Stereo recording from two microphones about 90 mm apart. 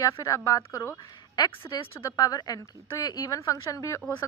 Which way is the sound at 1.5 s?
75° left (ahead or behind).